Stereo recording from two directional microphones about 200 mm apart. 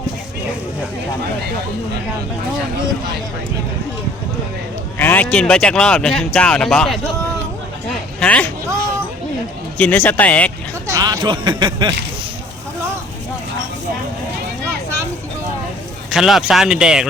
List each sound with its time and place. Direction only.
4.9 s speech: 10° left (ahead or behind)
8.2 s speech: 5° left (ahead or behind)
9.7 s speech: 5° left (ahead or behind)
10.8 s speech: 15° right (ahead or behind)
16.1 s speech: centre (ahead or behind)